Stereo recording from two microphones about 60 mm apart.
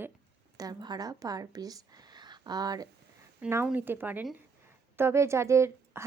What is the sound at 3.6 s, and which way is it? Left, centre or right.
Speech, right.